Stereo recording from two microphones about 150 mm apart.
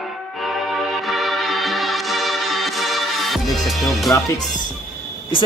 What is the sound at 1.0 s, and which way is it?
Music, centre (ahead or behind).